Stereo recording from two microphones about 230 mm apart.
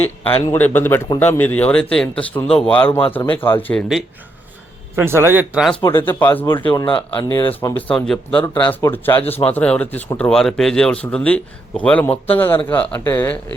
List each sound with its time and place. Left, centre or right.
0.3 s speech: left
0.5 s speech: centre
4.9 s speech: centre
6.1 s speech: centre
6.8 s speech: left
7.3 s speech: centre